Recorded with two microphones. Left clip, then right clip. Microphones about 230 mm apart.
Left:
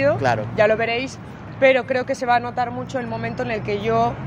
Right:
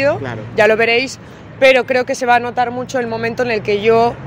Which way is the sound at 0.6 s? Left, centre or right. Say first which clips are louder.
Right 9 dB; right.